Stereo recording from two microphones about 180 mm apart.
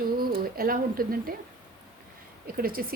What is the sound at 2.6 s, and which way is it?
Speech, 55° right (ahead or behind).